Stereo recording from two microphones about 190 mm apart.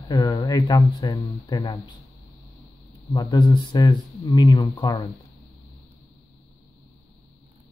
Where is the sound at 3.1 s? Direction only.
20° left (ahead or behind).